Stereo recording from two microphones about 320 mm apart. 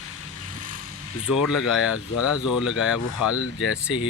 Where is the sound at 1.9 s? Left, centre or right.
Left.